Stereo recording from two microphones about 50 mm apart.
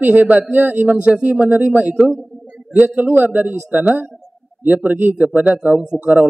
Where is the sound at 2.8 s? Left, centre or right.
Right.